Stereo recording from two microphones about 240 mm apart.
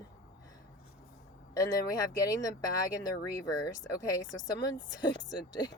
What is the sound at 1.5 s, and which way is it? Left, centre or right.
Speech, centre.